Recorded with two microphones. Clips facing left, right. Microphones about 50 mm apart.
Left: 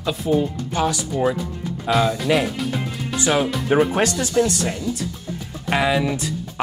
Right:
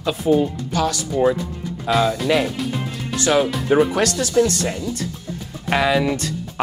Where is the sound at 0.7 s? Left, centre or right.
Centre.